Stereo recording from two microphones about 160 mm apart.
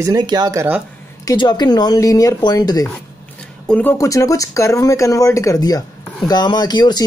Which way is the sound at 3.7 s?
10° left (ahead or behind).